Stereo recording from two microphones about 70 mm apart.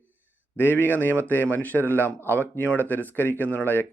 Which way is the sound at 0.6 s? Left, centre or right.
Left.